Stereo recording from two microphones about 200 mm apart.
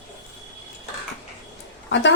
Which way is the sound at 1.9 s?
70° left (ahead or behind).